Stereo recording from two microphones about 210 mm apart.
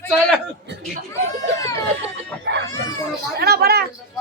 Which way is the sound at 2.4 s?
60° right (ahead or behind).